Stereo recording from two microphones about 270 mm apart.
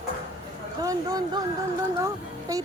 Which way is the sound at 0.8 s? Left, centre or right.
Centre.